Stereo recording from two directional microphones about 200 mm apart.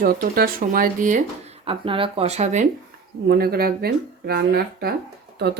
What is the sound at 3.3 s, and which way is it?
Speech, 50° right (ahead or behind).